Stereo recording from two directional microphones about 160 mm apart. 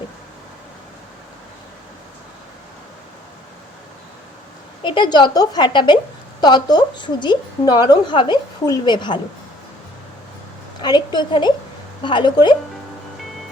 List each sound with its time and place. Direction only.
4.8 s a woman's voice: 30° left (ahead or behind)
10.8 s a woman's voice: 25° left (ahead or behind)